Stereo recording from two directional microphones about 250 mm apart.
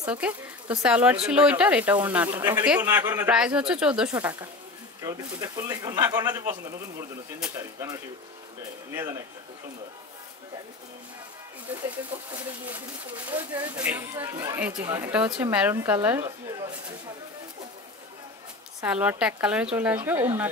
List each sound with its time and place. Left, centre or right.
0.0 s speech: centre
13.4 s speech: centre
18.8 s speech: centre